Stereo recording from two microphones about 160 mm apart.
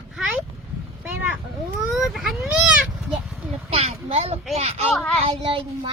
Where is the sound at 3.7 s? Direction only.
40° right (ahead or behind).